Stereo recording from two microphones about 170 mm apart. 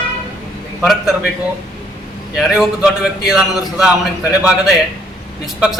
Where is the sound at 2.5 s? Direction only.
5° right (ahead or behind).